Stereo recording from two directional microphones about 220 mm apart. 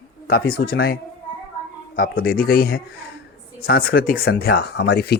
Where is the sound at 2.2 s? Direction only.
40° left (ahead or behind).